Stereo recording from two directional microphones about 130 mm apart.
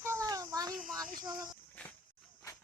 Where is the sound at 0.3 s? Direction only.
30° right (ahead or behind).